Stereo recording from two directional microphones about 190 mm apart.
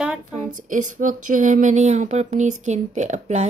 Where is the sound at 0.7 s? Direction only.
45° right (ahead or behind).